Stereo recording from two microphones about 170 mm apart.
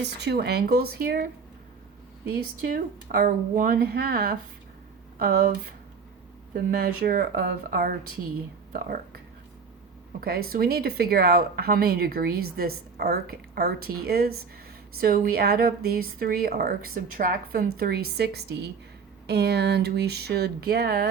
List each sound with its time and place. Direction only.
0.0 s speech: 75° right (ahead or behind); by 1.3 s 60° right (ahead or behind)
2.6 s speech: 60° right (ahead or behind)
6.5 s speech: 60° right (ahead or behind)
10.2 s speech: 60° right (ahead or behind)